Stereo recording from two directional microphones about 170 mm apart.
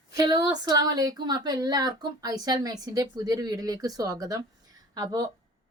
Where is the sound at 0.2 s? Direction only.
25° right (ahead or behind).